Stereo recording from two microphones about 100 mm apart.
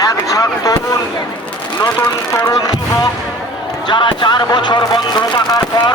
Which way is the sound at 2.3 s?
30° left (ahead or behind).